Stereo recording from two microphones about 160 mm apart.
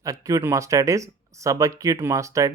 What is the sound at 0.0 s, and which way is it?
Speech, 20° right (ahead or behind).